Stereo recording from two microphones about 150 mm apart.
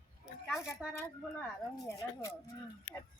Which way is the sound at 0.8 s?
5° right (ahead or behind).